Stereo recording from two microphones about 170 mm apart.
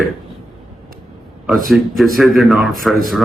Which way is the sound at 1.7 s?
Centre (ahead or behind).